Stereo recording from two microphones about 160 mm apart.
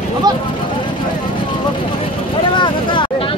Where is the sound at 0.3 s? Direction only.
25° right (ahead or behind).